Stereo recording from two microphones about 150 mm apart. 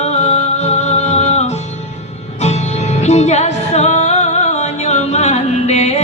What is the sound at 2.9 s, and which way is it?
Music, 50° left (ahead or behind).